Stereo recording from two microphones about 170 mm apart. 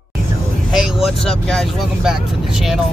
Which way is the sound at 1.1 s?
5° left (ahead or behind).